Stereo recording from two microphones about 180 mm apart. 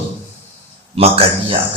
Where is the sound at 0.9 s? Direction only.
30° right (ahead or behind).